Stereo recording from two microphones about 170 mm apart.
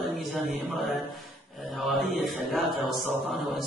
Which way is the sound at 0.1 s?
5° right (ahead or behind).